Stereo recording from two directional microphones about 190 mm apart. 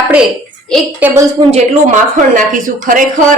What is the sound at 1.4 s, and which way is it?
Speech, 35° right (ahead or behind).